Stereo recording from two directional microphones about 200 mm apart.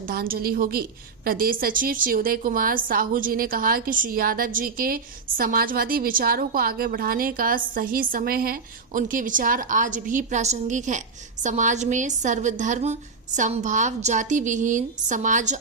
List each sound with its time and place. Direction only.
0.1 s a woman's voice: 50° right (ahead or behind)